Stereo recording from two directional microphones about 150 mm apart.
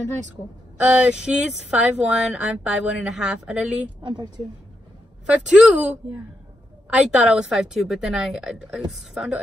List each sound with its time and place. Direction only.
0.7 s speech: 10° right (ahead or behind)
4.0 s a woman's voice: 30° right (ahead or behind)
5.2 s a woman's voice: 10° right (ahead or behind)